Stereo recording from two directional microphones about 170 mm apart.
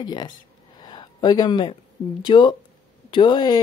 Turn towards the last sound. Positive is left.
turn(degrees=25)  # may be behind; listen again after turning